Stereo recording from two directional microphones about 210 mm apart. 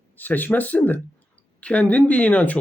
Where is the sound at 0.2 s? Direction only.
10° left (ahead or behind).